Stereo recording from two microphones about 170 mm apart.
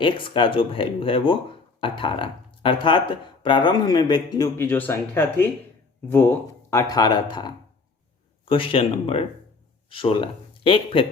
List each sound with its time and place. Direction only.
0.0 s speech: 30° left (ahead or behind)